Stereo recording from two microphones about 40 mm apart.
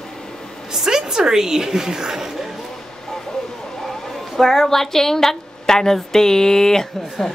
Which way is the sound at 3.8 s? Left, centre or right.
Centre.